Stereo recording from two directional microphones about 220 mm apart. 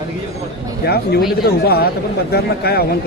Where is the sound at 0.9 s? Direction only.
45° left (ahead or behind).